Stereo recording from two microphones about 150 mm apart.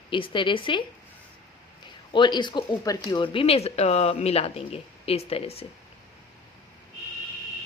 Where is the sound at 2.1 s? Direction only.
30° left (ahead or behind).